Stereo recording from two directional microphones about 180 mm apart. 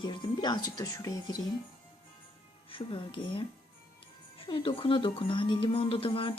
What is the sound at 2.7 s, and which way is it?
Speech, 30° left (ahead or behind).